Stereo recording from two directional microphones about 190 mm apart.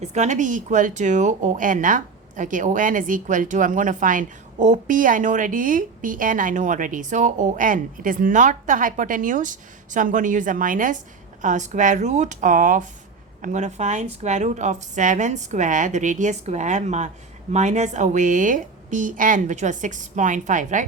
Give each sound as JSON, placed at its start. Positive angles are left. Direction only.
{"t": 0.0, "sound": "a woman's voice", "side_deg": -40}